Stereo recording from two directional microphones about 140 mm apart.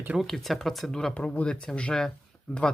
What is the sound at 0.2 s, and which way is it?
Speech, centre (ahead or behind).